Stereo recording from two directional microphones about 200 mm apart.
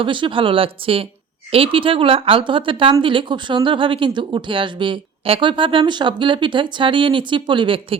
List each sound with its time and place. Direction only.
0.0 s a woman's voice: 25° right (ahead or behind)